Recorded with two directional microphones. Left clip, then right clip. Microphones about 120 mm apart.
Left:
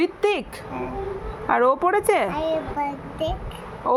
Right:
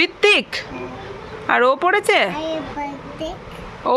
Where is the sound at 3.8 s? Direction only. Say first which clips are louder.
Right 3 dB; 10° left (ahead or behind).